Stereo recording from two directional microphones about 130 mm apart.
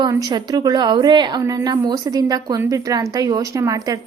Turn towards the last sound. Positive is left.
turn(degrees=-25)  # may be behind; listen again after turning